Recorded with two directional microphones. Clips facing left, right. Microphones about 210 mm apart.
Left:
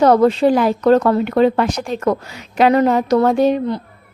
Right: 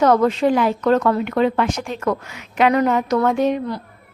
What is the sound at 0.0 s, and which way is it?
A woman's voice, 35° left (ahead or behind).